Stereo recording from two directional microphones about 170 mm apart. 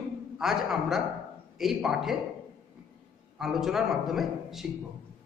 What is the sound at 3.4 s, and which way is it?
A man's voice, centre (ahead or behind).